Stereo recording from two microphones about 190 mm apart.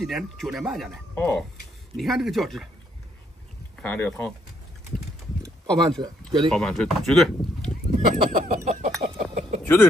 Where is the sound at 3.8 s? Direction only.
10° left (ahead or behind).